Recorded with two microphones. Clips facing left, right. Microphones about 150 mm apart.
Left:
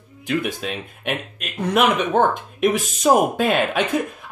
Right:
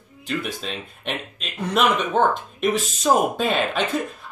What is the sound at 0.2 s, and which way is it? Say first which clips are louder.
Speech: left 4 dB; 10° left (ahead or behind).